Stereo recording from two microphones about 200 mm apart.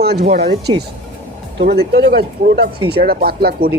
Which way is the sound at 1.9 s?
50° right (ahead or behind).